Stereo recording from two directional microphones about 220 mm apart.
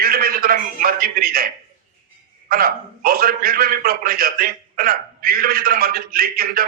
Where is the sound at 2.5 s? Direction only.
40° right (ahead or behind).